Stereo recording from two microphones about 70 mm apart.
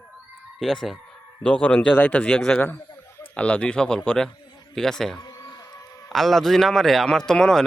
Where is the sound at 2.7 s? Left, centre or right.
Left.